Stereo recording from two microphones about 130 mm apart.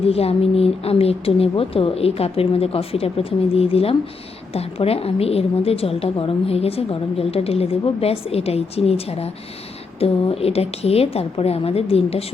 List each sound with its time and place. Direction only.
0.0 s a woman's voice: 50° left (ahead or behind)